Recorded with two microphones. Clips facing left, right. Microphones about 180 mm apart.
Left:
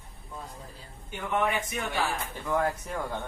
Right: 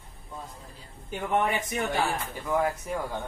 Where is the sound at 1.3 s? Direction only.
40° right (ahead or behind).